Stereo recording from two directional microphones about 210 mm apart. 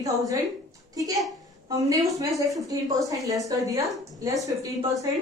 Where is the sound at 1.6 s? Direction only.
15° right (ahead or behind).